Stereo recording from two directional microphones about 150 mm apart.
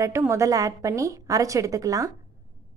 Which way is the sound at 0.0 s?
20° right (ahead or behind).